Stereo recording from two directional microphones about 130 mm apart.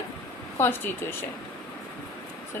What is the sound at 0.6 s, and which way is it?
Speech, 15° left (ahead or behind).